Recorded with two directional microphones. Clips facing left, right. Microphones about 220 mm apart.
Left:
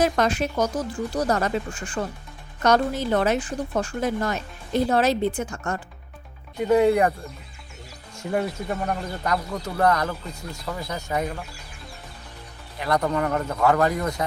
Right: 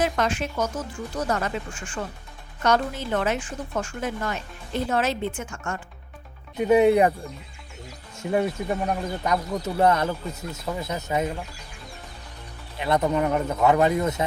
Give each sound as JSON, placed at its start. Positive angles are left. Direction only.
{"t": 0.0, "sound": "a woman's voice", "side_deg": 40}
{"t": 6.7, "sound": "speech", "side_deg": -20}
{"t": 8.4, "sound": "speech", "side_deg": -10}
{"t": 9.8, "sound": "speech", "side_deg": -25}
{"t": 12.8, "sound": "speech", "side_deg": -25}